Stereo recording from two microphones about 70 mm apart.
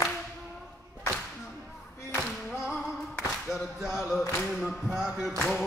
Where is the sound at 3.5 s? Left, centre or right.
Centre.